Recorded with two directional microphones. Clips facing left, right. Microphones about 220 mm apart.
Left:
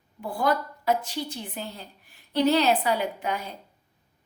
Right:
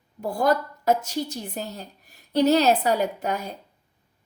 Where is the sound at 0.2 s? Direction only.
45° right (ahead or behind).